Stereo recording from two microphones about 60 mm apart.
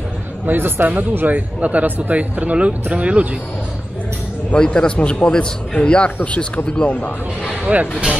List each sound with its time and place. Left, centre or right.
0.5 s speech: right
4.6 s a man's voice: centre
7.6 s speech: right